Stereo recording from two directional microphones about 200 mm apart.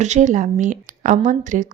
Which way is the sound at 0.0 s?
35° right (ahead or behind).